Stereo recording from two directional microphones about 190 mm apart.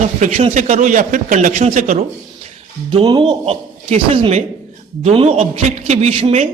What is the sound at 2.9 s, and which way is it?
A man's voice, 25° right (ahead or behind).